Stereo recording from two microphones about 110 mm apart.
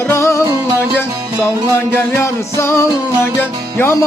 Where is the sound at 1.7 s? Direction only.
25° left (ahead or behind).